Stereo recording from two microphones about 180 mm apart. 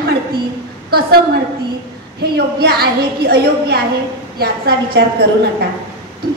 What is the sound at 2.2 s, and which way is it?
A woman's voice, 60° right (ahead or behind).